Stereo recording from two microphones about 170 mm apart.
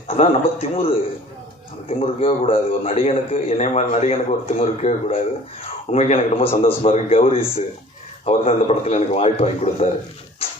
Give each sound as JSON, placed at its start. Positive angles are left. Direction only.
{"t": 0.1, "sound": "a man's voice", "side_deg": 35}